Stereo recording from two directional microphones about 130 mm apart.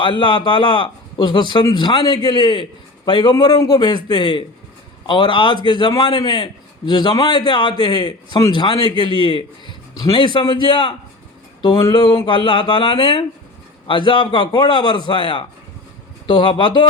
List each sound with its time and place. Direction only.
0.0 s a man's voice: 40° left (ahead or behind)